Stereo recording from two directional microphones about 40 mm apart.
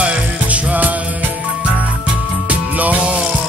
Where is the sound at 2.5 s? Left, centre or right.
Right.